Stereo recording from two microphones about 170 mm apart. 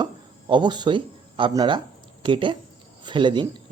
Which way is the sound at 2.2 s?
30° right (ahead or behind).